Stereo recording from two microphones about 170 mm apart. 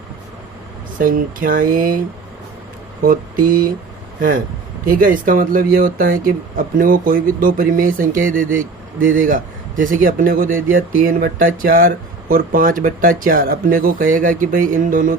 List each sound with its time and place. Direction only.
0.9 s speech: 55° right (ahead or behind)